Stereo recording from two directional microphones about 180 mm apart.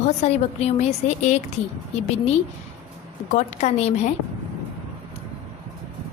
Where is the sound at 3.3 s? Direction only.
40° left (ahead or behind).